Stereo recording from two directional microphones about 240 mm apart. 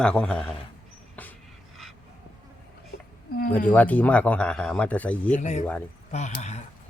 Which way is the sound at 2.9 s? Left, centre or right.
Left.